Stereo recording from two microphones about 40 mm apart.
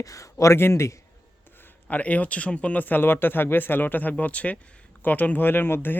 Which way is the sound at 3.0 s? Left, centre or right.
Left.